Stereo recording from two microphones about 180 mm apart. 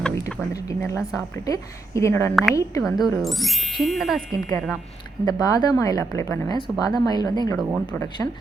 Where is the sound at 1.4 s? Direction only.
20° left (ahead or behind).